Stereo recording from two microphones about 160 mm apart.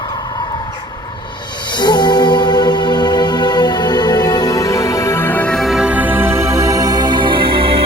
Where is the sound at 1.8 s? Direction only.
25° left (ahead or behind).